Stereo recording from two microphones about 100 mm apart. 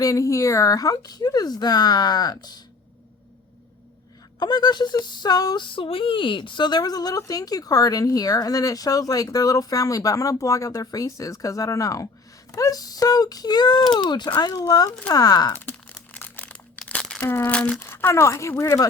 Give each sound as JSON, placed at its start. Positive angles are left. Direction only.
{"t": 0.0, "sound": "child singing", "side_deg": 35}
{"t": 4.4, "sound": "child singing", "side_deg": 45}
{"t": 15.5, "sound": "crumpling", "side_deg": 20}
{"t": 16.1, "sound": "a sound", "side_deg": 20}
{"t": 16.7, "sound": "crumpling", "side_deg": 5}
{"t": 17.2, "sound": "speech", "side_deg": 20}
{"t": 17.7, "sound": "speech", "side_deg": 25}